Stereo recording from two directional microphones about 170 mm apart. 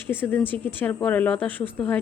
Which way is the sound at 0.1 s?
10° left (ahead or behind).